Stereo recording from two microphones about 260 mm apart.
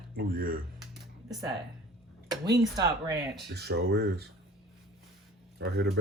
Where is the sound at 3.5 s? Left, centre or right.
Right.